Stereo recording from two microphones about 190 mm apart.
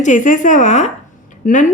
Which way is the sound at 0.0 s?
40° left (ahead or behind).